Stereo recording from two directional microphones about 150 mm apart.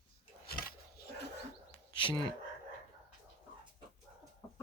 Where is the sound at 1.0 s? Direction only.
90° left.